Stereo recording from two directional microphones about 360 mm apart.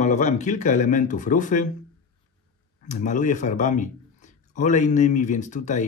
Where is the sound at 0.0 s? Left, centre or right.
Centre.